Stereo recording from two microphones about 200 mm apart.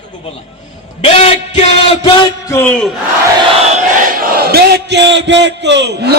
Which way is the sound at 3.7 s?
45° right (ahead or behind).